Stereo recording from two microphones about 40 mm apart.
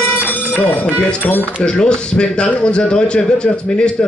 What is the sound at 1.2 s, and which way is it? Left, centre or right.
Speech, left.